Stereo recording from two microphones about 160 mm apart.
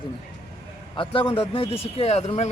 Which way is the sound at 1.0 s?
35° left (ahead or behind).